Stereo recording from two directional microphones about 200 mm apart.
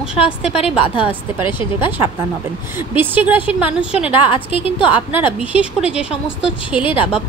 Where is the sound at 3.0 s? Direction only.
10° right (ahead or behind).